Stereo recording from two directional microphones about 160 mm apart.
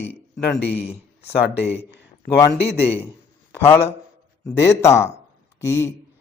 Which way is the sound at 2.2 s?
15° left (ahead or behind).